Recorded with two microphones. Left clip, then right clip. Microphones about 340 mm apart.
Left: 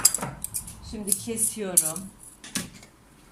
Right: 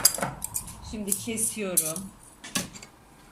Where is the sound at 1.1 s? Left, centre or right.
Centre.